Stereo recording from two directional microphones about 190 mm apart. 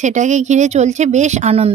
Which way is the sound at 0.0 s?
40° right (ahead or behind).